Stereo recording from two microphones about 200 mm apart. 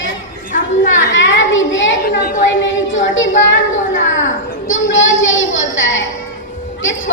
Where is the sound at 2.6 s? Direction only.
70° left (ahead or behind).